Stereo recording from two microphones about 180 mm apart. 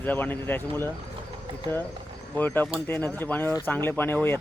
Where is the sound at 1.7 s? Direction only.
25° right (ahead or behind).